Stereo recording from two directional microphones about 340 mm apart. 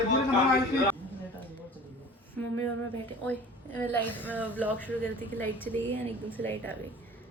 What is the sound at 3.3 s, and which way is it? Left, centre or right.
A woman's voice, centre.